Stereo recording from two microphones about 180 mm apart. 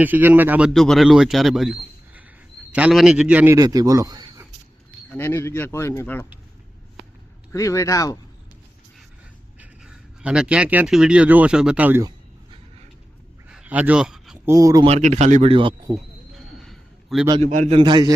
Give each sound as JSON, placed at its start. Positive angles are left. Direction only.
{"t": 0.0, "sound": "a man's voice", "side_deg": -10}
{"t": 0.7, "sound": "a man's voice", "side_deg": 0}
{"t": 5.1, "sound": "speech", "side_deg": 15}
{"t": 7.5, "sound": "speech", "side_deg": 15}
{"t": 9.6, "sound": "speech", "side_deg": -5}
{"t": 13.5, "sound": "a sound", "side_deg": -5}
{"t": 14.4, "sound": "speech", "side_deg": -20}
{"t": 14.8, "sound": "speech", "side_deg": -40}
{"t": 16.3, "sound": "a sound", "side_deg": 0}
{"t": 17.4, "sound": "a man's voice", "side_deg": -40}
{"t": 17.7, "sound": "speech", "side_deg": -25}